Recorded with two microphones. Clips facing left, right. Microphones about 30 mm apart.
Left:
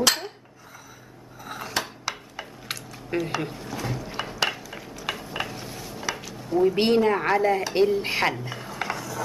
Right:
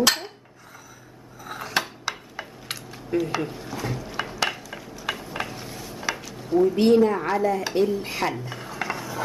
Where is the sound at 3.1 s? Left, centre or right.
Left.